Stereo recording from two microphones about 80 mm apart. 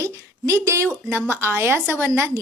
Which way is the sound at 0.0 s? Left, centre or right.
Right.